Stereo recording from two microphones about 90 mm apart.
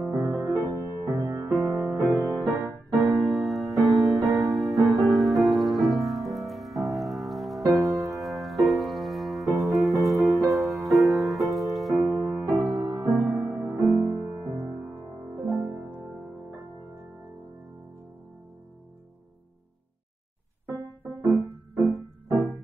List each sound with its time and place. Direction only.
0.0 s music: 35° right (ahead or behind)
3.2 s music: centre (ahead or behind)
12.0 s music: 30° right (ahead or behind)
15.3 s music: 25° right (ahead or behind)